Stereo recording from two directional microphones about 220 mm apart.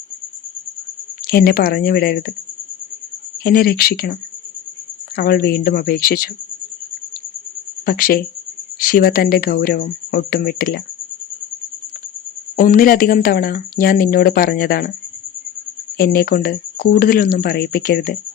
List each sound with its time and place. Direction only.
1.3 s speech: 45° left (ahead or behind)
3.4 s speech: 45° left (ahead or behind)
7.9 s speech: 40° left (ahead or behind)
12.5 s speech: 40° left (ahead or behind)
16.0 s speech: 40° left (ahead or behind)